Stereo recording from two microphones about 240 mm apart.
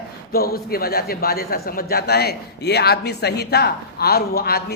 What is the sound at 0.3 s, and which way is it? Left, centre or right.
A man's voice, left.